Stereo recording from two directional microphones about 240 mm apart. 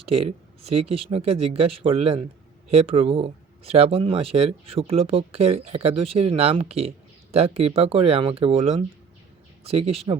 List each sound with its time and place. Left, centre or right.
0.1 s speech: right